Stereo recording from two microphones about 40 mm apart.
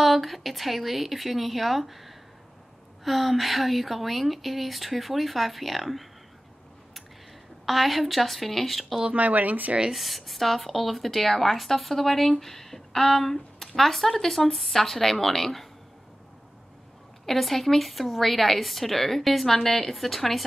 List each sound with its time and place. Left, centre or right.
0.0 s a woman's voice: centre
7.6 s a woman's voice: centre
9.0 s speech: right
9.9 s a woman's voice: centre
17.3 s a woman's voice: centre